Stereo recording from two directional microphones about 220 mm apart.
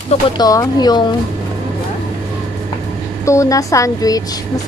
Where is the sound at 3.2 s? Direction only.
15° left (ahead or behind).